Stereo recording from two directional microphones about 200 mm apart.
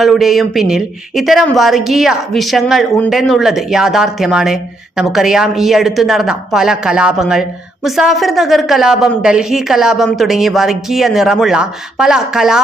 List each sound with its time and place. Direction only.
0.0 s speech: centre (ahead or behind)